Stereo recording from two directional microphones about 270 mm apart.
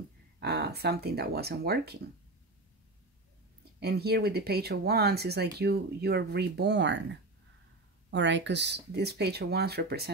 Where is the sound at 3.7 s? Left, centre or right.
Right.